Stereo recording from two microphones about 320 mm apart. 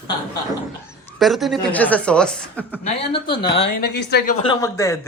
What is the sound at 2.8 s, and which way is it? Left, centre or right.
Speech, centre.